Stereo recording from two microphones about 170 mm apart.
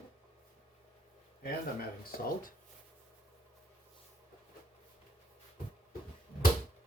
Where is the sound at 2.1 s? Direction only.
55° left (ahead or behind).